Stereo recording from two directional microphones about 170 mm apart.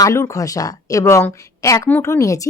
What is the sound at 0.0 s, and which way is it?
Speech, 20° left (ahead or behind).